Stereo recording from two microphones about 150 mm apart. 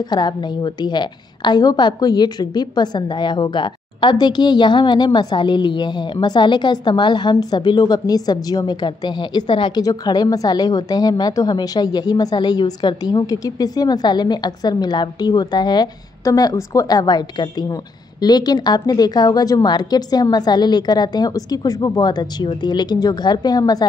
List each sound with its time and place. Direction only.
0.1 s a woman's voice: 30° left (ahead or behind)